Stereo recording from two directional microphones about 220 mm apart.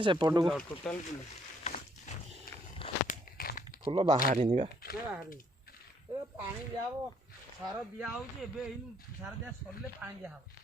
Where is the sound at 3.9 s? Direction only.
25° right (ahead or behind).